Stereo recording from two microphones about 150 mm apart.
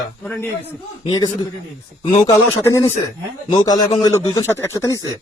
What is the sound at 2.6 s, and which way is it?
Speech, 20° left (ahead or behind).